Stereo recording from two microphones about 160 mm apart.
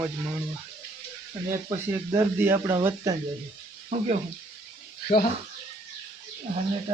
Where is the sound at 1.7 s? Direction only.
25° right (ahead or behind).